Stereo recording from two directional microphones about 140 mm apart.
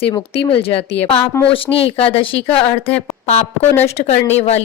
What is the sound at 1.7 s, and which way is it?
Speech, 45° left (ahead or behind).